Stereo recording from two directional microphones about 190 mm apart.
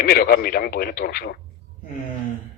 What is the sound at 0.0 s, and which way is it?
Speech, 50° left (ahead or behind).